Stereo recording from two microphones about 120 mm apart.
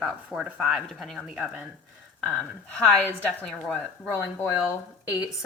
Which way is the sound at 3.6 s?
10° left (ahead or behind).